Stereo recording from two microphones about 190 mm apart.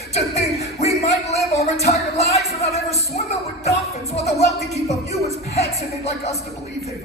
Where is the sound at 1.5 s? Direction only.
35° left (ahead or behind).